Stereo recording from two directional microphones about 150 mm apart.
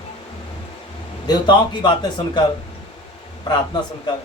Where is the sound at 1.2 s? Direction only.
30° left (ahead or behind).